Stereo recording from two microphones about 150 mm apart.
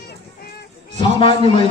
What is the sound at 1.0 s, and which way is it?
Speech, 35° left (ahead or behind).